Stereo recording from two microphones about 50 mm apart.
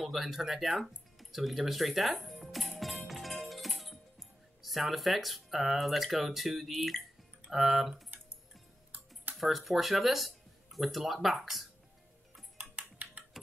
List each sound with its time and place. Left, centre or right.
0.0 s speech: centre
3.1 s music: centre
7.5 s speech: centre
9.4 s speech: centre
12.5 s typing: right